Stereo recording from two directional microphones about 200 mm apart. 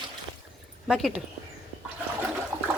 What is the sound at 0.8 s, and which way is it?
Speech, centre (ahead or behind).